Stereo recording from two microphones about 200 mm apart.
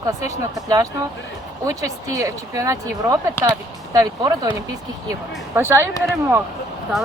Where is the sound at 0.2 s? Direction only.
15° right (ahead or behind).